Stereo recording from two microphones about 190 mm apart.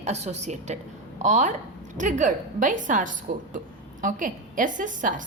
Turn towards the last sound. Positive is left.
turn(degrees=-45)  # may be behind; listen again after turning